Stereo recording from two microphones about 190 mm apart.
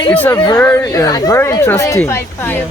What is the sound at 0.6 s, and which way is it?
Speech, 15° left (ahead or behind).